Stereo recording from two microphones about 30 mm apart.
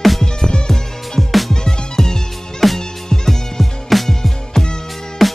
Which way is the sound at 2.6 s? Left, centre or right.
Centre.